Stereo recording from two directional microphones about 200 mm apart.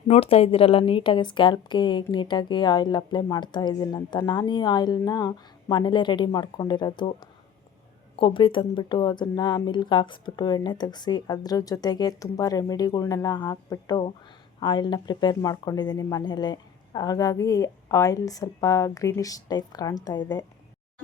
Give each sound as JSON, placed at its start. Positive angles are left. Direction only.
{"t": 0.1, "sound": "a woman's voice", "side_deg": 30}
{"t": 8.1, "sound": "a woman's voice", "side_deg": 25}